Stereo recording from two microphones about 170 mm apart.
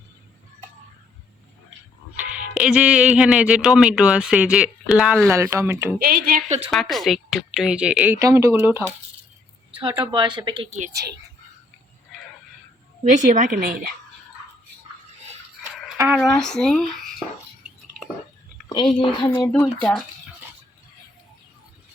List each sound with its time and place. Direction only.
2.6 s speech: 5° right (ahead or behind)
5.3 s speech: 15° right (ahead or behind)
6.0 s a woman's voice: 60° right (ahead or behind)
6.7 s speech: centre (ahead or behind)
8.2 s speech: 15° right (ahead or behind)
10.0 s a woman's voice: 30° right (ahead or behind)
10.7 s a woman's voice: 45° right (ahead or behind)
10.9 s speech: 70° right (ahead or behind)
13.1 s a woman's voice: 50° right (ahead or behind)
16.0 s speech: 10° right (ahead or behind)
16.2 s speech: 5° left (ahead or behind)
18.7 s speech: 25° left (ahead or behind)
19.3 s speech: 15° left (ahead or behind)